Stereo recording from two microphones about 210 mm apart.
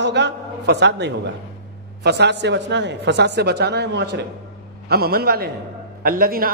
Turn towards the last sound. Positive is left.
turn(degrees=-45)  # may be behind; listen again after turning